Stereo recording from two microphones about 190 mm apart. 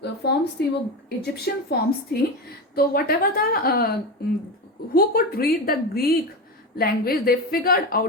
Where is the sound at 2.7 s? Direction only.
50° left (ahead or behind).